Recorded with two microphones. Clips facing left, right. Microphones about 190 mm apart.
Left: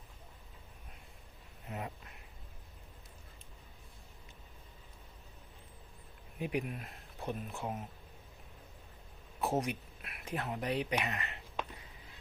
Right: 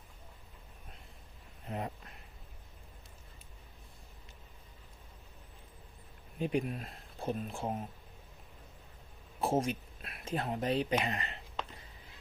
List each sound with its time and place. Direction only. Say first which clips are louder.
1.6 s speech: right 3 dB; 35° right (ahead or behind)
6.4 s speech: right 3 dB; 30° right (ahead or behind)
9.4 s speech: right 3 dB; 30° right (ahead or behind)